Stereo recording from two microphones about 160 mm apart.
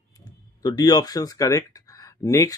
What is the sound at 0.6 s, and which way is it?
Speech, 25° left (ahead or behind).